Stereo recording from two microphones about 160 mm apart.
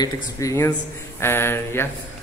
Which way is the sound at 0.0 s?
20° left (ahead or behind).